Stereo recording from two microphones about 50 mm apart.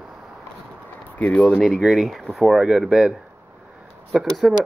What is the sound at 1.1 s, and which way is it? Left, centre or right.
Speech, left.